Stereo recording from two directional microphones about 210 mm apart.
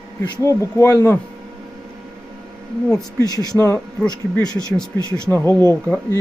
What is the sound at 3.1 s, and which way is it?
Speech, 20° left (ahead or behind).